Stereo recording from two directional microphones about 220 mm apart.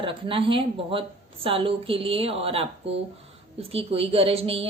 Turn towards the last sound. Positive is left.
turn(degrees=-25)  # may be behind; listen again after turning